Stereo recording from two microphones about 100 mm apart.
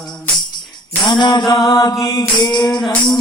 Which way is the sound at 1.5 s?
35° left (ahead or behind).